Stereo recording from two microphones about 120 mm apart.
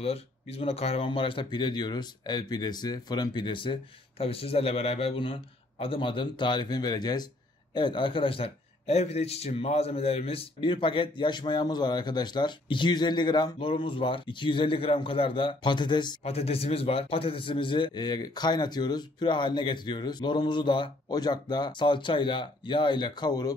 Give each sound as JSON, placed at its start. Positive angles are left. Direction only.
{"t": 0.0, "sound": "a man's voice", "side_deg": 55}
{"t": 16.3, "sound": "a man's voice", "side_deg": 55}